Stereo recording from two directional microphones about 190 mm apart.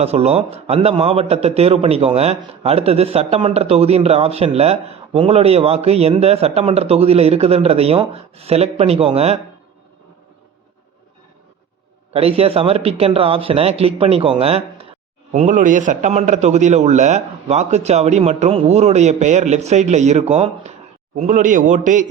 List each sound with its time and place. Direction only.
0.0 s a man's voice: 35° right (ahead or behind)
12.1 s a man's voice: 30° right (ahead or behind)